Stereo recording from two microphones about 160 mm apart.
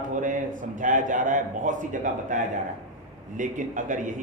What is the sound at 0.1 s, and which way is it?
A man's voice, 55° right (ahead or behind).